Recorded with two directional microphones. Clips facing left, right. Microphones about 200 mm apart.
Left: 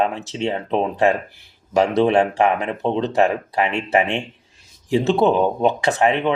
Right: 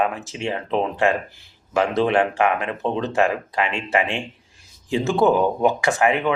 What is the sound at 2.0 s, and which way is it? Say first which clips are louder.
Speech: left 2 dB; 25° left (ahead or behind).